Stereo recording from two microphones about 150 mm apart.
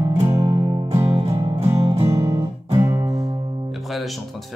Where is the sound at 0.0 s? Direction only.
30° right (ahead or behind).